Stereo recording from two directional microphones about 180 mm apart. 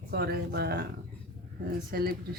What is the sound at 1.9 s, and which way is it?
Speech, 55° right (ahead or behind).